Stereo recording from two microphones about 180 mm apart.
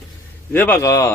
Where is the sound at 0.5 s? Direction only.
10° left (ahead or behind).